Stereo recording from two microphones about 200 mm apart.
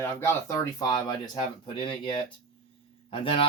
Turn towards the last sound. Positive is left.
turn(degrees=25)  # may be behind; listen again after turning